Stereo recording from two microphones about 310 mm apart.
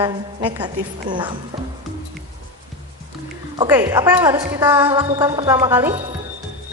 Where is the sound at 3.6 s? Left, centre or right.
Centre.